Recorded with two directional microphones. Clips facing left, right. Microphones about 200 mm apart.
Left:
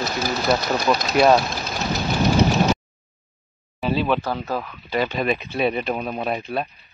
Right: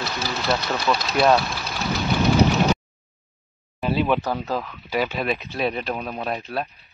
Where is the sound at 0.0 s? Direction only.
45° left (ahead or behind).